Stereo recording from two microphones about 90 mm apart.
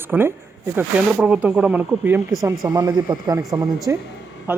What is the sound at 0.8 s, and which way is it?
Speech, 15° right (ahead or behind).